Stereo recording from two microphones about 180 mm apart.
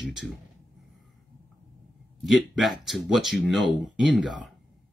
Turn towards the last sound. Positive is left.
turn(degrees=0)  # may be behind; listen again after turning